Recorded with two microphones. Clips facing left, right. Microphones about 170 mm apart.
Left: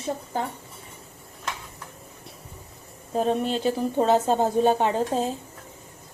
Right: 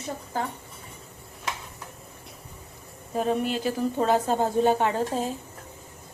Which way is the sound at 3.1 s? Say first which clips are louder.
Left 2 dB; 30° left (ahead or behind).